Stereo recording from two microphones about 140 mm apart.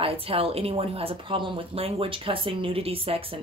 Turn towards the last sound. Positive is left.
turn(degrees=-45)  # may be behind; listen again after turning